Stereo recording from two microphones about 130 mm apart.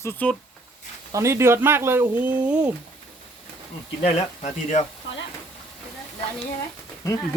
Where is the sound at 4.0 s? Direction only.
60° left (ahead or behind).